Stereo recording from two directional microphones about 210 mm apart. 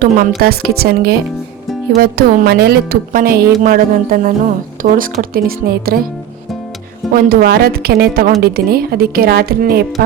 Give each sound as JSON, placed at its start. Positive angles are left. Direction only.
{"t": 0.0, "sound": "speech", "side_deg": -45}
{"t": 7.1, "sound": "speech", "side_deg": -45}